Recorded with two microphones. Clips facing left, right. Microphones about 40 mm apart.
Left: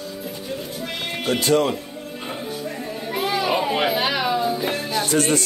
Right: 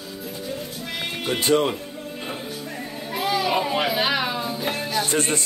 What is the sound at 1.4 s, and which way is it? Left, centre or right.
Speech, right.